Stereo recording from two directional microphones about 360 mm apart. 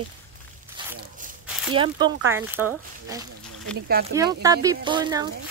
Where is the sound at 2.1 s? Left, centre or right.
Right.